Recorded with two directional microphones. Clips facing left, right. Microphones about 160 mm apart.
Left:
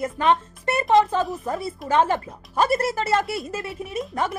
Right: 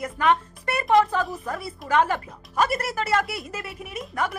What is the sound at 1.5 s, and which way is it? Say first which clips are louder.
A woman's voice: left 2 dB; 25° left (ahead or behind).